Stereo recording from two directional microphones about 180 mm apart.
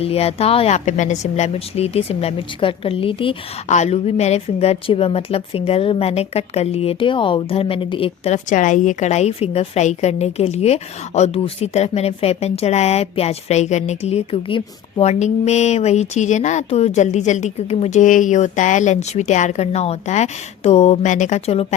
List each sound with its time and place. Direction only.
0.0 s a woman's voice: 35° left (ahead or behind)